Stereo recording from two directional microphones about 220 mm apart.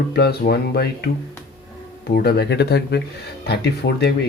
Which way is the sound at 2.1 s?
50° left (ahead or behind).